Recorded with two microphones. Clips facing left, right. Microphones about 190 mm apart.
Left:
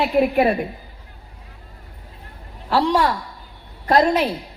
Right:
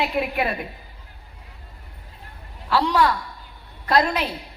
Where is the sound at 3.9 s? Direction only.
40° left (ahead or behind).